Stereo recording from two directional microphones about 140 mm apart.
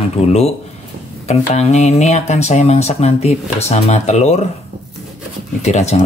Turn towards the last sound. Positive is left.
turn(degrees=50)  # may be behind; listen again after turning